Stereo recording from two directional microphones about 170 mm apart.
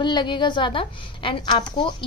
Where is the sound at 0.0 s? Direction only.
30° left (ahead or behind).